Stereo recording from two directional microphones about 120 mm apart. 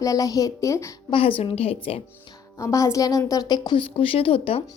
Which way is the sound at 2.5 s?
25° left (ahead or behind).